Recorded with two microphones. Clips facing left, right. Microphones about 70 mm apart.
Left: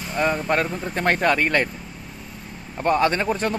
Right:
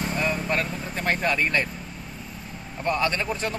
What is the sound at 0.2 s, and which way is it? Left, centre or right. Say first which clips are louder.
Speech: left 7 dB; left.